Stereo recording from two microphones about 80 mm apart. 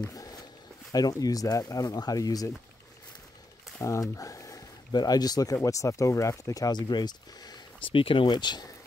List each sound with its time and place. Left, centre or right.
0.1 s walk: left
0.9 s speech: left
3.8 s speech: left
4.9 s speech: left